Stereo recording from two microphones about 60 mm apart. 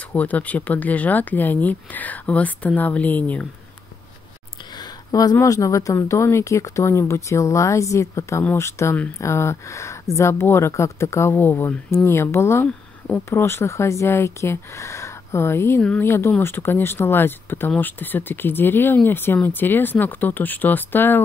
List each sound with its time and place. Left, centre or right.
0.1 s speech: left
5.1 s speech: left
6.0 s speech: left